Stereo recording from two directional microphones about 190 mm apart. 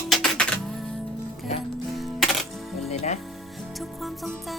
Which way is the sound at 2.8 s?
35° left (ahead or behind).